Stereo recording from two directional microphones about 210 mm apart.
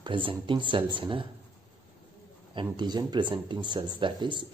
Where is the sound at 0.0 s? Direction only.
25° right (ahead or behind).